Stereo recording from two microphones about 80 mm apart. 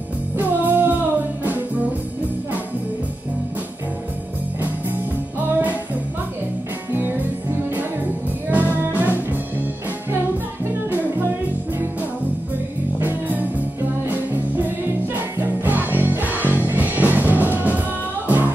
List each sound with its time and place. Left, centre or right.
0.4 s music: right
5.4 s music: right
6.9 s music: right
8.5 s music: right
13.0 s music: right